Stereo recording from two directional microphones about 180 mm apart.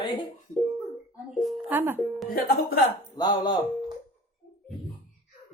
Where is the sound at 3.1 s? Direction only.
25° left (ahead or behind).